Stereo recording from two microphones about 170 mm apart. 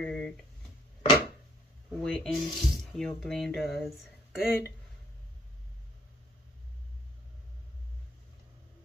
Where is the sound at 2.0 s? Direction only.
5° left (ahead or behind).